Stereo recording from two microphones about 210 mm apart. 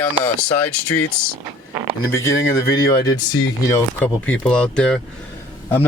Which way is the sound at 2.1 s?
15° left (ahead or behind).